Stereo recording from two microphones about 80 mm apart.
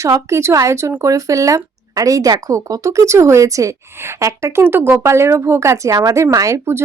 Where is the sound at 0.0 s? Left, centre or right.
Right.